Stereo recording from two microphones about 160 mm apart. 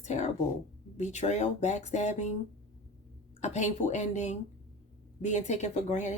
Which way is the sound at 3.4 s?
45° left (ahead or behind).